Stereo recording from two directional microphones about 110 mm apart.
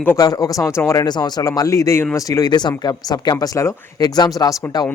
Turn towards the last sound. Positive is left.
turn(degrees=35)  # may be behind; listen again after turning